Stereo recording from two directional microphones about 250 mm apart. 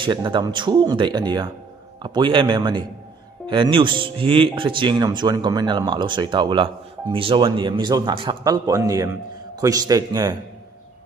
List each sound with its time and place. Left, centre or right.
0.0 s speech: centre